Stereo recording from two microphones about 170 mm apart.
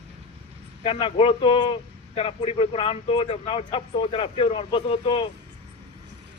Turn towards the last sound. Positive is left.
turn(degrees=30)  # may be behind; listen again after turning